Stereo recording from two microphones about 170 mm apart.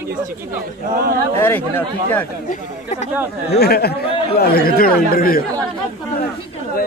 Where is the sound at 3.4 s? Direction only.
70° left (ahead or behind).